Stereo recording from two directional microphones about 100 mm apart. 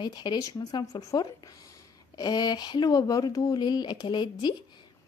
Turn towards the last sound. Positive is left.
turn(degrees=50)  # may be behind; listen again after turning